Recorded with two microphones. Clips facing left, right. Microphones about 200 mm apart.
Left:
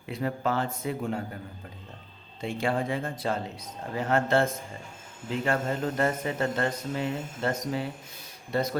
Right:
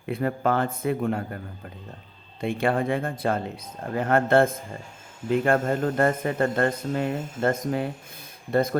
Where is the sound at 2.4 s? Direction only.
60° right (ahead or behind).